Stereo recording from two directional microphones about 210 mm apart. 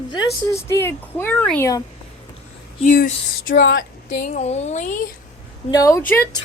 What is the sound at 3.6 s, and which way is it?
Speech, 65° left (ahead or behind).